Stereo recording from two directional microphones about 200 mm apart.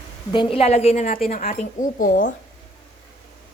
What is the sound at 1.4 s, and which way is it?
Speech, 35° left (ahead or behind).